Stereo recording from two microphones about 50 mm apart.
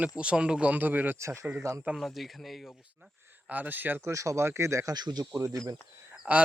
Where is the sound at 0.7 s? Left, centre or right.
Right.